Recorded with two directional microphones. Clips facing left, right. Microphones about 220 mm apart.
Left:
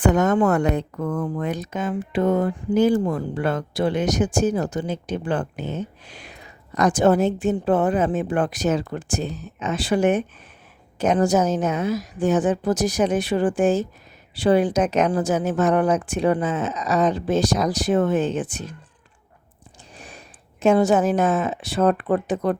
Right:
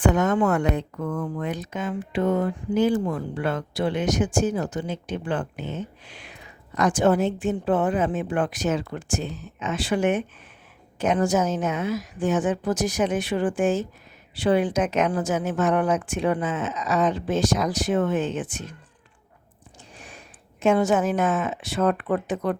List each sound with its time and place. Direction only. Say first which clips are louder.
0.0 s speech: left 3 dB; 40° left (ahead or behind)
20.0 s a woman's voice: left 4 dB; 35° left (ahead or behind)